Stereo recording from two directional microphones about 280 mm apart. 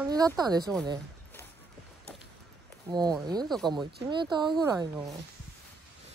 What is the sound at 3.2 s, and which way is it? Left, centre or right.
Speech, centre.